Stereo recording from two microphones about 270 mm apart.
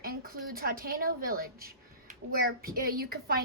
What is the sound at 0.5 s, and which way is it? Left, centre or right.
A woman's voice, right.